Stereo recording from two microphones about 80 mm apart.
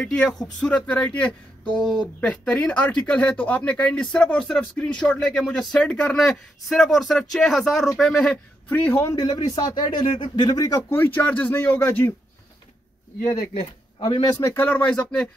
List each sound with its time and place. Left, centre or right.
0.0 s speech: centre
6.1 s speech: centre
8.6 s speech: left
9.1 s speech: left
10.5 s speech: left
10.9 s speech: left
14.4 s speech: left
14.9 s speech: centre